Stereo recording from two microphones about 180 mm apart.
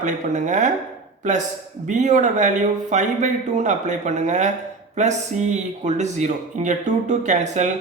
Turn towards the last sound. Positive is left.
turn(degrees=-40)  # may be behind; listen again after turning